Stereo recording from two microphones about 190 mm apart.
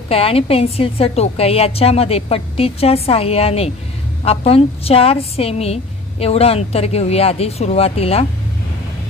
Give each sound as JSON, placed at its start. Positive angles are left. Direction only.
{"t": 0.1, "sound": "a woman's voice", "side_deg": 30}